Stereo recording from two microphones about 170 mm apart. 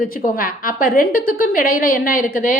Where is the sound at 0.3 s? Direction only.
55° left (ahead or behind).